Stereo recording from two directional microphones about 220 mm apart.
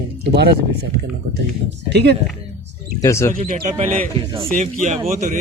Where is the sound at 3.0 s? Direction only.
10° left (ahead or behind).